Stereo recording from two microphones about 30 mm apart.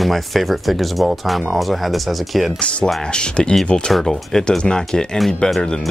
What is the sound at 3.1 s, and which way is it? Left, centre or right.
Speech, left.